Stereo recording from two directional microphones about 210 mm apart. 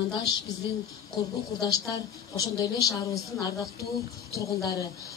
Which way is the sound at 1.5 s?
20° left (ahead or behind).